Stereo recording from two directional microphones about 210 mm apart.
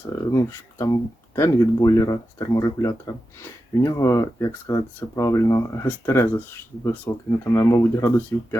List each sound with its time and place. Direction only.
0.2 s speech: 15° left (ahead or behind)